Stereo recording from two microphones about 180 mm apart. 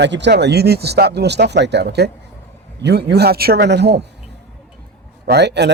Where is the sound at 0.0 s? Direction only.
75° right (ahead or behind).